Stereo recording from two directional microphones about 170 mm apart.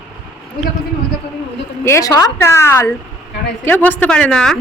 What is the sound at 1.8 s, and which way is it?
Speech, 15° left (ahead or behind).